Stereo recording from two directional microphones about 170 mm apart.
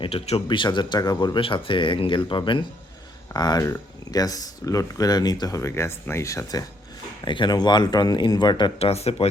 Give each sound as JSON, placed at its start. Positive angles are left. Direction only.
{"t": 0.0, "sound": "speech", "side_deg": 35}